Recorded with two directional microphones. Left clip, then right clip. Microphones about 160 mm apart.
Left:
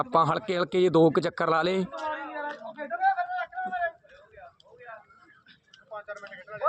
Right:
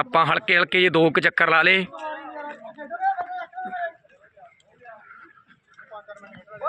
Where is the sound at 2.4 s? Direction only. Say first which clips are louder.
Left 1 dB; 35° right (ahead or behind).